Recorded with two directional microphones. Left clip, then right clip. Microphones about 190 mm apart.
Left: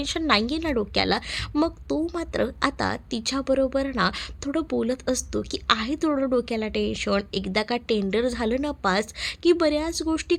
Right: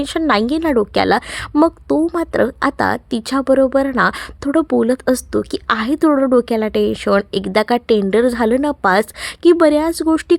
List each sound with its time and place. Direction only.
0.0 s a woman's voice: 30° right (ahead or behind)